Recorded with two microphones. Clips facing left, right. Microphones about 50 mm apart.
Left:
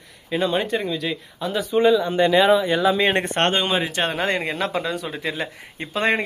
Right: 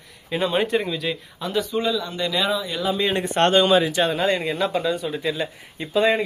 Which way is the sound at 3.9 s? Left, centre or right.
Left.